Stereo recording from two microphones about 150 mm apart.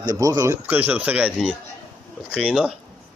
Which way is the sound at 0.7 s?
10° right (ahead or behind).